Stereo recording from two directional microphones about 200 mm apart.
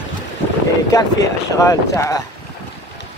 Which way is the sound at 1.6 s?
15° left (ahead or behind).